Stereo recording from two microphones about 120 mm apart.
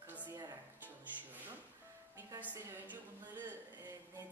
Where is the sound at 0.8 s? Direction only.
15° right (ahead or behind).